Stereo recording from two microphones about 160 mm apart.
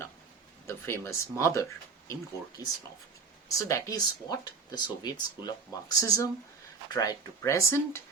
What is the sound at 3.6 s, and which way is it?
Speech, 20° left (ahead or behind).